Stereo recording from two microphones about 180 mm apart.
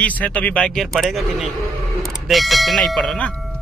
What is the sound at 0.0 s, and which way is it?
Speech, 10° left (ahead or behind).